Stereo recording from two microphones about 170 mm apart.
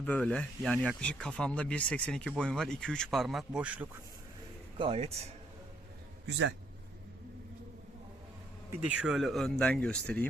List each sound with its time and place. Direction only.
0.0 s speech: 10° left (ahead or behind); by 3.8 s 10° right (ahead or behind)
4.8 s speech: 35° right (ahead or behind)
6.2 s a man's voice: 90° right
8.9 s speech: 5° right (ahead or behind)